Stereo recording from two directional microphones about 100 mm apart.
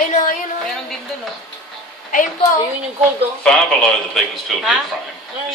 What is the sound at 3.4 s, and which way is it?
Speech, 5° left (ahead or behind).